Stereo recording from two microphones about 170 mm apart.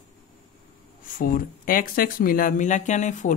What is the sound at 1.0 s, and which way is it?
Speech, 55° left (ahead or behind).